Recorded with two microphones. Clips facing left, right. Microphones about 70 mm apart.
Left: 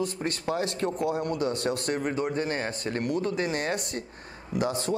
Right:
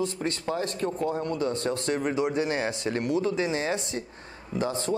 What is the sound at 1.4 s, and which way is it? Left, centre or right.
Speech, left.